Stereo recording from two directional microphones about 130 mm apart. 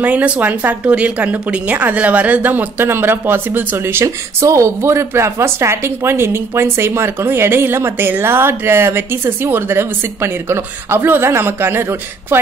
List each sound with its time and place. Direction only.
0.0 s speech: 10° right (ahead or behind)